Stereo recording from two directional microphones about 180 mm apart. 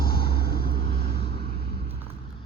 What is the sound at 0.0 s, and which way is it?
Vehicle, 55° left (ahead or behind).